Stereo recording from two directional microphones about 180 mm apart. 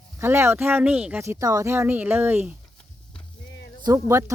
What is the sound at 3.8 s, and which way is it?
Speech, 15° right (ahead or behind).